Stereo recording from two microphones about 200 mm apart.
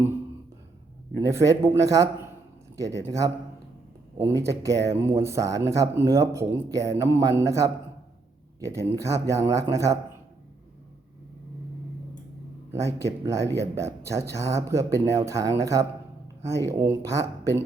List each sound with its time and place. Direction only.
1.2 s speech: 15° right (ahead or behind)
9.0 s speech: 15° right (ahead or behind)
12.7 s speech: 15° right (ahead or behind)